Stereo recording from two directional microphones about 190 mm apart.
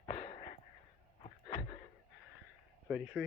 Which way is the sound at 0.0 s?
30° left (ahead or behind).